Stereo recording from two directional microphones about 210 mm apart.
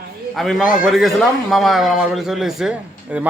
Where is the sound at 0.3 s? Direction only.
Centre (ahead or behind).